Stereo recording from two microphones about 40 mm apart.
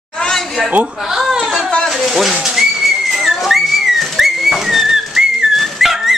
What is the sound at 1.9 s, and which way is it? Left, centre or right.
Speech, centre.